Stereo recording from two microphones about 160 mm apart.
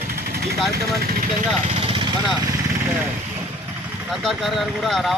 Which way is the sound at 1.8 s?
30° right (ahead or behind).